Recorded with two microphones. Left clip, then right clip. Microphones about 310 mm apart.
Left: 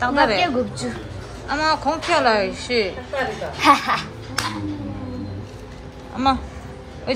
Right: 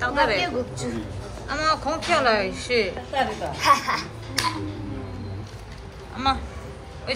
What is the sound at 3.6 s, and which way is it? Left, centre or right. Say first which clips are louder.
Speech: left 4 dB; left.